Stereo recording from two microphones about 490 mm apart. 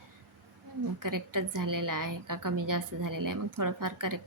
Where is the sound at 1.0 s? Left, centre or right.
Right.